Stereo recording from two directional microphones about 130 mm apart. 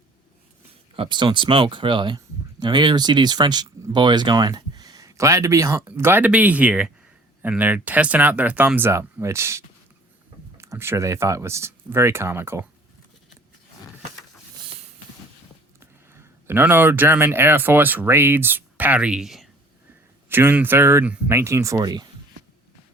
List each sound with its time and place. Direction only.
0.9 s speech: 35° right (ahead or behind); by 9.6 s 20° right (ahead or behind)
10.6 s speech: 20° right (ahead or behind)
15.8 s speech: 20° right (ahead or behind); by 19.5 s centre (ahead or behind)
20.3 s speech: 15° right (ahead or behind)